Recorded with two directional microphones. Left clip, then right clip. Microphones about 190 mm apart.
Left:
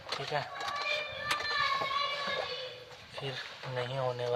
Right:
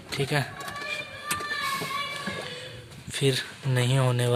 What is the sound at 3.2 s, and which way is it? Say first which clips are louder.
Speech: right 12 dB; 20° right (ahead or behind).